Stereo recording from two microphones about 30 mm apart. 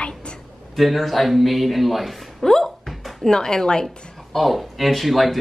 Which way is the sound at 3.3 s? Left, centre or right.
Left.